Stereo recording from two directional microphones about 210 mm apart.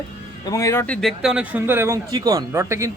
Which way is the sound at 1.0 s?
Centre (ahead or behind).